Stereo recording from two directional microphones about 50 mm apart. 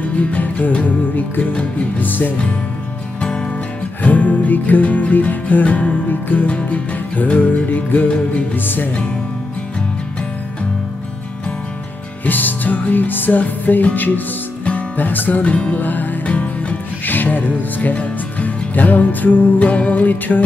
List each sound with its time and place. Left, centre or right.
0.0 s music: left
3.2 s music: centre
4.0 s music: left
12.3 s music: left
16.3 s music: left
17.0 s music: left